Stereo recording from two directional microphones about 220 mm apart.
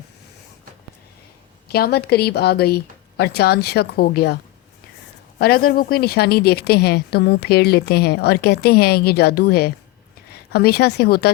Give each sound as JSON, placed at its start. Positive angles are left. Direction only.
{"t": 1.6, "sound": "a woman's voice", "side_deg": 45}
{"t": 5.4, "sound": "a woman's voice", "side_deg": 45}